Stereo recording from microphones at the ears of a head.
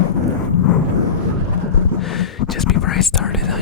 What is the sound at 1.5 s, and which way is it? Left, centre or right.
Whispering, left.